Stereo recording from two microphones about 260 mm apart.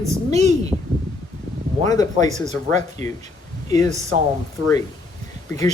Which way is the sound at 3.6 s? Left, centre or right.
Centre.